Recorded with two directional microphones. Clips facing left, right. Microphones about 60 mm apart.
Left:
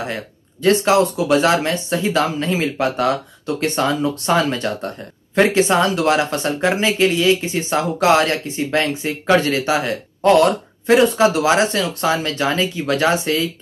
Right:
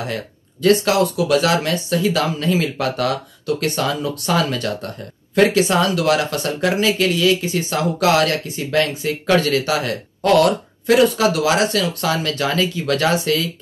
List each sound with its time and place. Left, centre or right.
0.0 s speech: left